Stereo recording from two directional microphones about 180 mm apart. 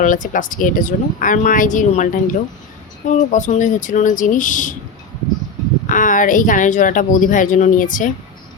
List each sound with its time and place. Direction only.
0.0 s speech: 45° left (ahead or behind)
5.9 s speech: 45° left (ahead or behind)